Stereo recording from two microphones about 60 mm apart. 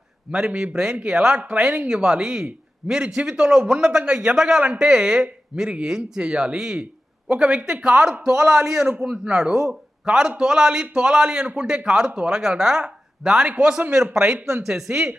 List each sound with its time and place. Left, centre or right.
0.3 s a man's voice: centre
4.6 s a man's voice: right
4.9 s a man's voice: centre